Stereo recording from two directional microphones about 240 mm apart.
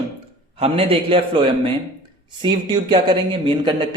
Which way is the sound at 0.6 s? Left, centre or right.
Right.